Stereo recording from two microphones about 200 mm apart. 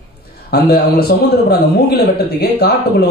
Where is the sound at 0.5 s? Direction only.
50° left (ahead or behind).